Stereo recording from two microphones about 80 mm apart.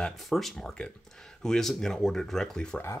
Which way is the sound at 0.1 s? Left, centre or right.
Centre.